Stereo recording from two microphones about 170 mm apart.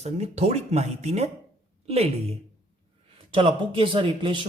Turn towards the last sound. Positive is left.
turn(degrees=-30)  # may be behind; listen again after turning